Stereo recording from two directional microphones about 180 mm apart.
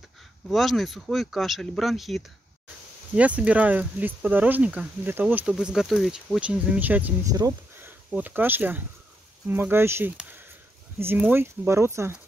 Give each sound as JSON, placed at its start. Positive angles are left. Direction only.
{"t": 0.5, "sound": "speech", "side_deg": 0}
{"t": 7.3, "sound": "speech", "side_deg": -20}